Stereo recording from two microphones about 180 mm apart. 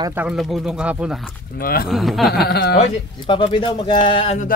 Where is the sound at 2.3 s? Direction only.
60° left (ahead or behind).